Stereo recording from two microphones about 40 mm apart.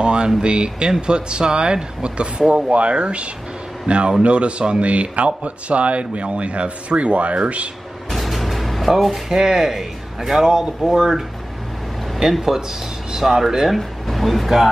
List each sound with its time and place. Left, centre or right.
0.0 s a sound: right
0.4 s speech: right
8.1 s music: centre
9.4 s speech: centre
13.7 s speech: centre